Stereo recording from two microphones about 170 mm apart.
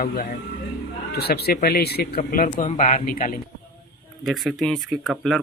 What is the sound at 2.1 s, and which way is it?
A man's voice, 50° left (ahead or behind).